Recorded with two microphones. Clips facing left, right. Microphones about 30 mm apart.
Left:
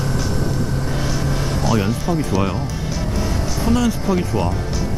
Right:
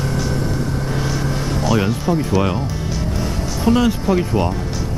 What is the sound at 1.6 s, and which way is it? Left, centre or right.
Speech, centre.